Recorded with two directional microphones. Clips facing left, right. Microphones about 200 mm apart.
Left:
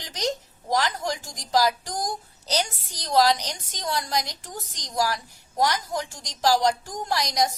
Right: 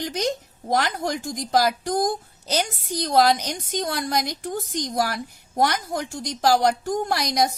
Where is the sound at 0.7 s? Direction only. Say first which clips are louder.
Right 2 dB; 55° right (ahead or behind).